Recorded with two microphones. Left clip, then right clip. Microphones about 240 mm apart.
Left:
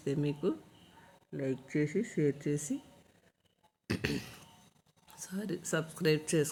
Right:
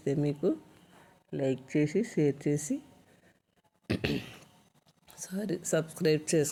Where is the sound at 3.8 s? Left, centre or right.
Centre.